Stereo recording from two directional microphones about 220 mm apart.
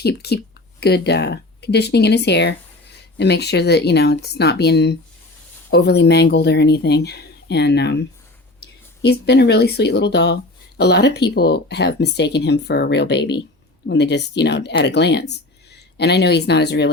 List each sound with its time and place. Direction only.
0.0 s speech: 45° left (ahead or behind)